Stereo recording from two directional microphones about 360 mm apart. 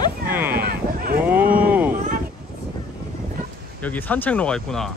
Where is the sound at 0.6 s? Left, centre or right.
Right.